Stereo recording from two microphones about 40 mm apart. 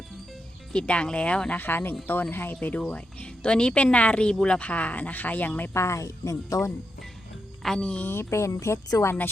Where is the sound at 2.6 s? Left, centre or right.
Left.